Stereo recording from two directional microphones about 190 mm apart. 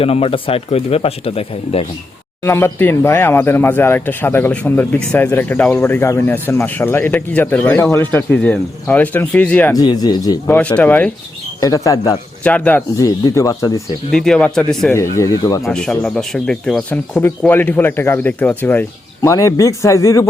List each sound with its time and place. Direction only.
0.0 s speech: 30° left (ahead or behind)
2.4 s speech: 15° left (ahead or behind)
9.7 s speech: 20° left (ahead or behind)
10.4 s speech: 10° left (ahead or behind)
11.6 s speech: 15° left (ahead or behind)
14.1 s speech: 5° left (ahead or behind)
15.2 s speech: 15° left (ahead or behind)
15.6 s speech: centre (ahead or behind)